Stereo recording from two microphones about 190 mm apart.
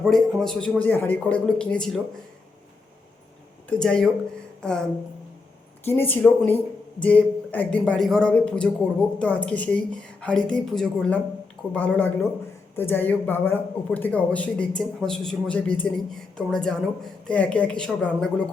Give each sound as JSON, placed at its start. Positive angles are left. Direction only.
{"t": 0.0, "sound": "a man's voice", "side_deg": 0}
{"t": 3.7, "sound": "a man's voice", "side_deg": 5}
{"t": 5.8, "sound": "a man's voice", "side_deg": 10}